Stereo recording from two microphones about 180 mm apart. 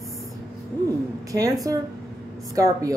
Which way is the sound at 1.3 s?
20° right (ahead or behind).